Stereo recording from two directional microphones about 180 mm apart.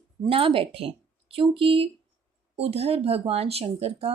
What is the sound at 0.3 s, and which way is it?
Speech, 30° right (ahead or behind).